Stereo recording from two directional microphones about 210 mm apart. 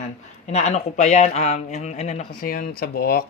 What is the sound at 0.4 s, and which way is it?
Speech, 35° left (ahead or behind).